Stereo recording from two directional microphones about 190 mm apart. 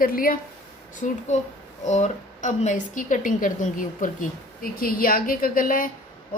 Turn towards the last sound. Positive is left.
turn(degrees=45)  # may be behind; listen again after turning